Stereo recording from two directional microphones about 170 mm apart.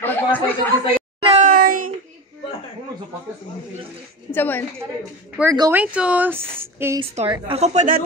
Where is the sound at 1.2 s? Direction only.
35° right (ahead or behind).